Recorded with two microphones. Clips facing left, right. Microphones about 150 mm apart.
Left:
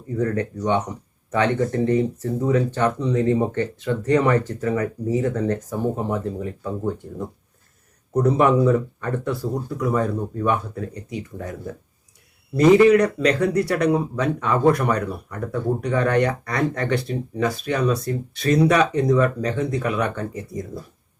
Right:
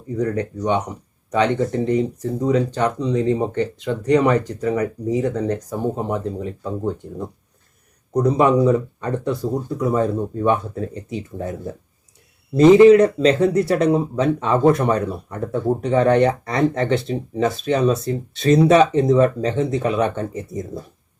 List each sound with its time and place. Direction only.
0.2 s speech: 15° right (ahead or behind)